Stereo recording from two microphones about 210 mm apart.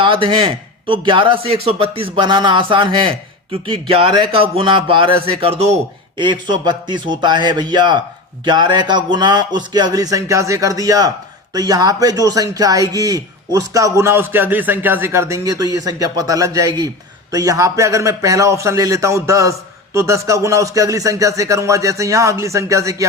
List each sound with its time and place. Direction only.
0.0 s a man's voice: 25° right (ahead or behind)